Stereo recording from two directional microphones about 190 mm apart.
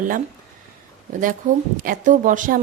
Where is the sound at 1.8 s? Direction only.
40° right (ahead or behind).